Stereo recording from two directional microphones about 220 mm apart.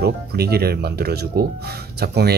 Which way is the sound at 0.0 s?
45° right (ahead or behind).